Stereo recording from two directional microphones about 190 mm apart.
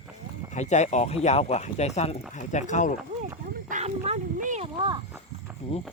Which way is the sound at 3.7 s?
40° right (ahead or behind).